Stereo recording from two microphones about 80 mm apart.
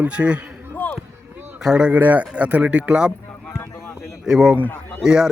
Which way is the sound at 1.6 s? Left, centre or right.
Centre.